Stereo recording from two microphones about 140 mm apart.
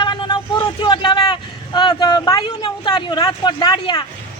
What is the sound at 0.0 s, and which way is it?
Speech, 30° left (ahead or behind).